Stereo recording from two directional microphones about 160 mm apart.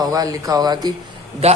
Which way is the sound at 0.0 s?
25° right (ahead or behind).